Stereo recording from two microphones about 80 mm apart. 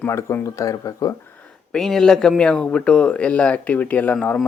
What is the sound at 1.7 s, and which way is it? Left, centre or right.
A man's voice, centre.